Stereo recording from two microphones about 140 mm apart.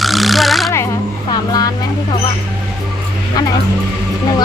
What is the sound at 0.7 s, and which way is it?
Speech, 20° left (ahead or behind).